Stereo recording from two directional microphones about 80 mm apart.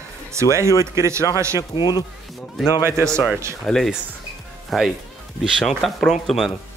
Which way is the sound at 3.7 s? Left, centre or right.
Centre.